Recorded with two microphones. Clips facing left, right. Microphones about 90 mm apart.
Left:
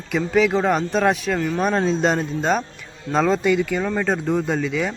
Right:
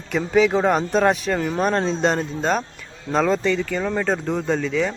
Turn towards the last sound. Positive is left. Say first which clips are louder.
# right 1 dB
turn(degrees=5)  # may be behind; listen again after turning